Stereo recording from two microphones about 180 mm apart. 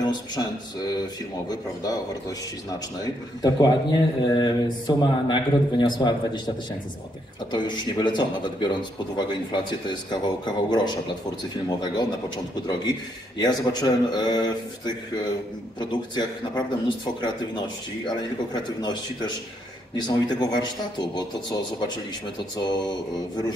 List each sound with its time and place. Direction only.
0.0 s a sound: 25° left (ahead or behind)
1.5 s speech: 20° left (ahead or behind)
3.0 s speech: 20° left (ahead or behind)
7.5 s speech: 25° left (ahead or behind)